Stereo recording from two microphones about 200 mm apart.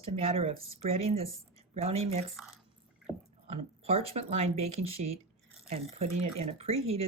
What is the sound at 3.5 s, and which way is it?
Speech, 30° right (ahead or behind).